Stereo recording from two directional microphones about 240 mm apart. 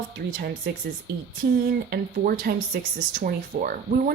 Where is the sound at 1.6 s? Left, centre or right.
Right.